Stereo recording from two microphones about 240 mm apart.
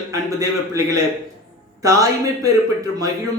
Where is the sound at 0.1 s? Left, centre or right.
Centre.